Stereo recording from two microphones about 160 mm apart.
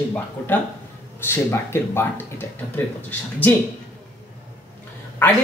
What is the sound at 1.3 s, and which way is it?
Speech, 15° left (ahead or behind).